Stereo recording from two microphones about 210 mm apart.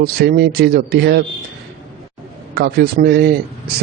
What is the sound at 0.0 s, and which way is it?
Speech, 50° right (ahead or behind).